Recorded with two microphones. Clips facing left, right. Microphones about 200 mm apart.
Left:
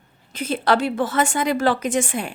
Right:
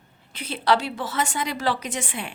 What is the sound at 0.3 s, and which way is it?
A woman's voice, 45° left (ahead or behind).